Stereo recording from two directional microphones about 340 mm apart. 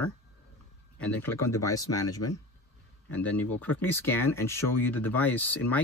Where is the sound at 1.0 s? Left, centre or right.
Centre.